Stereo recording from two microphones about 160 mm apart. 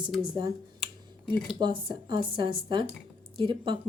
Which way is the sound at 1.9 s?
30° right (ahead or behind).